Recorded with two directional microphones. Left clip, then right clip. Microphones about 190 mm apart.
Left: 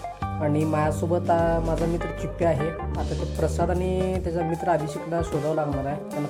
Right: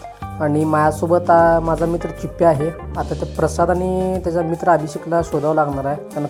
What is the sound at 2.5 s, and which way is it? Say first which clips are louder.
A woman's voice: right 6 dB; centre (ahead or behind).